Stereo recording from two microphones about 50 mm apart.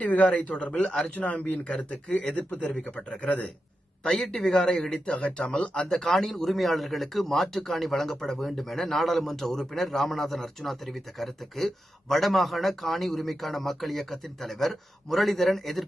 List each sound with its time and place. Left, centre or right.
0.0 s speech: left
1.1 s speech: left
4.2 s speech: centre; by 5.9 s left
5.9 s a man's voice: centre